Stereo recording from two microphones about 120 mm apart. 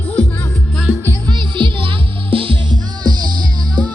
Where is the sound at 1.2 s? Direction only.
40° right (ahead or behind).